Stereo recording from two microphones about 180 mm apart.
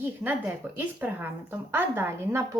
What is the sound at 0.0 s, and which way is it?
A woman's voice, 10° right (ahead or behind).